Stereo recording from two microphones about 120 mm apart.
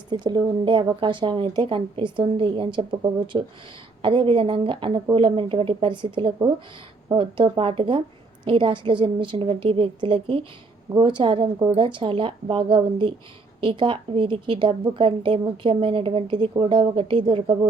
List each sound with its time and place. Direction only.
0.1 s speech: 40° right (ahead or behind)